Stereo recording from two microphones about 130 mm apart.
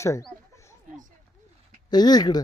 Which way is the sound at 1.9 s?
30° left (ahead or behind).